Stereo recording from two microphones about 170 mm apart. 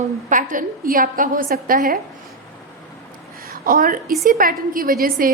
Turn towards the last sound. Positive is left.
turn(degrees=-60)  # may be behind; listen again after turning